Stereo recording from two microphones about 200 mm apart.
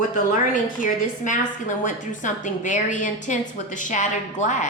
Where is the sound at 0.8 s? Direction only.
40° left (ahead or behind).